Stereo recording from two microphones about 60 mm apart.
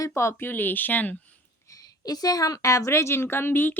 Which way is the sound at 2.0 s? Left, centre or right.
Left.